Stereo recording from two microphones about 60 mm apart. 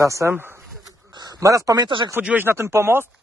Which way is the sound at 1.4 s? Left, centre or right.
Right.